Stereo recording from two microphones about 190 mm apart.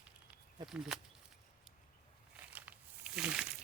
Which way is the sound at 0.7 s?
Centre (ahead or behind).